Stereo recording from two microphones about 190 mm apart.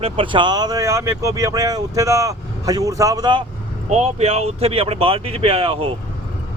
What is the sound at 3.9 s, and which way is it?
Speech, 35° right (ahead or behind).